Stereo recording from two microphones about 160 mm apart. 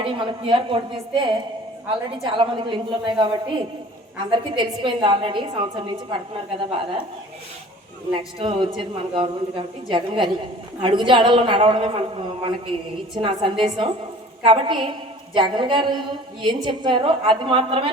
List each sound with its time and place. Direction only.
0.0 s a man's voice: 30° right (ahead or behind)
8.1 s a man's voice: 35° right (ahead or behind)
10.8 s a man's voice: 35° right (ahead or behind)